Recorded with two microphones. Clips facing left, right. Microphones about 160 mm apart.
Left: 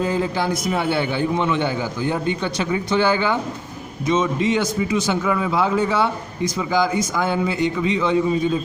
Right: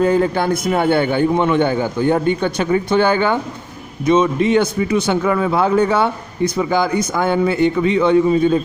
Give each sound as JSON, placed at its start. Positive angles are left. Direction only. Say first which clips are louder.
{"t": 0.0, "sound": "a man's voice", "louder": "right 6 dB", "side_deg": -60}